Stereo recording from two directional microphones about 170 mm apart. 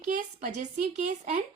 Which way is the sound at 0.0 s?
45° right (ahead or behind).